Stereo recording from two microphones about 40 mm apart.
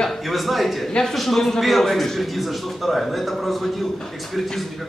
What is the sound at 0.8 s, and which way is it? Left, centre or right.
Speech, centre.